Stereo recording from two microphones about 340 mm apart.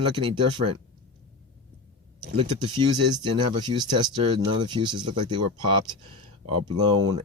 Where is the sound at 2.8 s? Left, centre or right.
Right.